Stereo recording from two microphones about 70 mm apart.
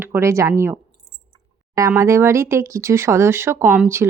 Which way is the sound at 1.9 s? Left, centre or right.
Right.